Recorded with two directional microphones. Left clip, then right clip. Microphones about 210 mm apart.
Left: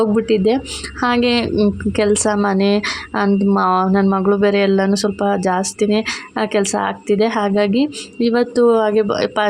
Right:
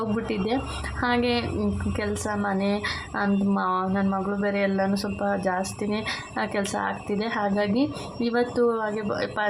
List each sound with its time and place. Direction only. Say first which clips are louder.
0.0 s a woman's voice: left 13 dB; 35° left (ahead or behind)